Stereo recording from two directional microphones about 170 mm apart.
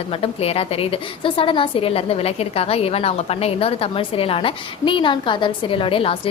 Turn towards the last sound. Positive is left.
turn(degrees=30)  # may be behind; listen again after turning